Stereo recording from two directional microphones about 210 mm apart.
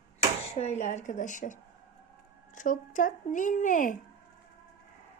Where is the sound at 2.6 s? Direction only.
40° left (ahead or behind).